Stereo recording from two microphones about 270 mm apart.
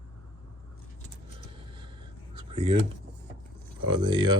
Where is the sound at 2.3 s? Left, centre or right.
Centre.